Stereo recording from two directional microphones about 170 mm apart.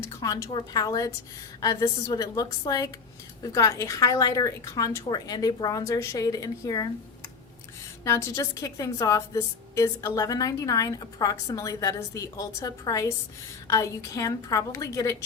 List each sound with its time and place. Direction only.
0.0 s a woman's voice: 20° left (ahead or behind)
8.0 s a woman's voice: 15° left (ahead or behind)